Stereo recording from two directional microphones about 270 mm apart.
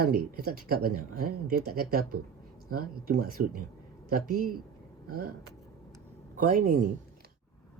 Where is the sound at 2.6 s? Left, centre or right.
Right.